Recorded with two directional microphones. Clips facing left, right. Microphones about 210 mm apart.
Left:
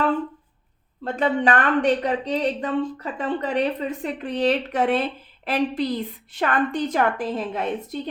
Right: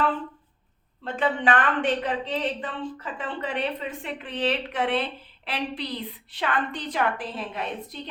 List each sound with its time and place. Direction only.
1.0 s a woman's voice: 40° left (ahead or behind)